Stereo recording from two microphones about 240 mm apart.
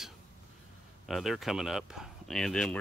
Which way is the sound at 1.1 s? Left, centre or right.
Centre.